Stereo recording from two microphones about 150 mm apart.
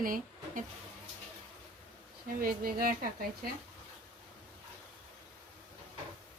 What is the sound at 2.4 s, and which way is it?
A woman's voice, 75° right (ahead or behind).